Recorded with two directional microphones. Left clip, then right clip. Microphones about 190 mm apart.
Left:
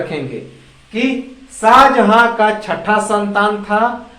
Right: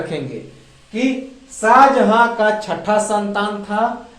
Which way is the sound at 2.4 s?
35° right (ahead or behind).